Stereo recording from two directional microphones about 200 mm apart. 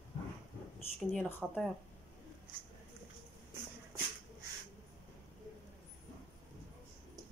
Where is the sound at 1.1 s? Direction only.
Centre (ahead or behind).